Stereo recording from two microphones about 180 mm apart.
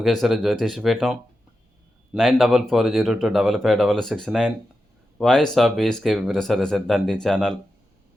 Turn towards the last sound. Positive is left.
turn(degrees=0)  # may be behind; listen again after turning